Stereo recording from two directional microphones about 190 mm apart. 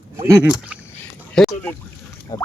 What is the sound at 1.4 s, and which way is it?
Boat, centre (ahead or behind).